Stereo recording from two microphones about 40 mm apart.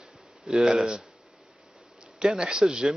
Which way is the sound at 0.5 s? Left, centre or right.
Centre.